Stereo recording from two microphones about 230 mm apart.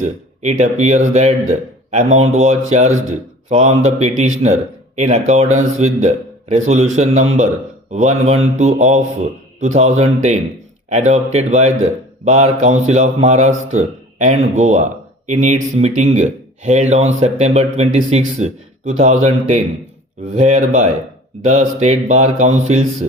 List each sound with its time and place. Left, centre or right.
0.0 s a man's voice: right